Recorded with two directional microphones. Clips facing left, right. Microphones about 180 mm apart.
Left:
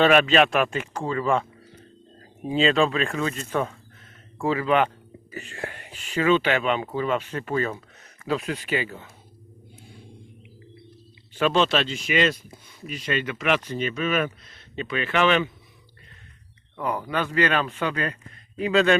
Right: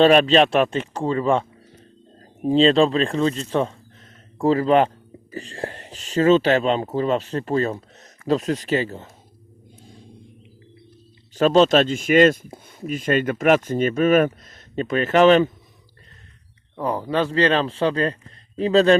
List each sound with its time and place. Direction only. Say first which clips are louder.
0.0 s speech: right 4 dB; 30° right (ahead or behind)
11.3 s speech: right 6 dB; 40° right (ahead or behind)
16.7 s speech: right 5 dB; 25° right (ahead or behind)